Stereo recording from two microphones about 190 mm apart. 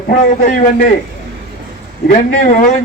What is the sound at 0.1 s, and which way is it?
Speech, 45° left (ahead or behind).